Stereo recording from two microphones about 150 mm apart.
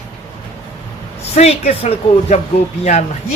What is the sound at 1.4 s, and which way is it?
Speech, 45° left (ahead or behind).